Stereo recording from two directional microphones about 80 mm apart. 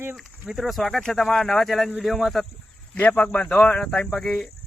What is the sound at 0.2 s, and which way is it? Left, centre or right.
Speech, centre.